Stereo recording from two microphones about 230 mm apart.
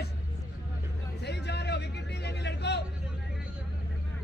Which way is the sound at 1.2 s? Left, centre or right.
Left.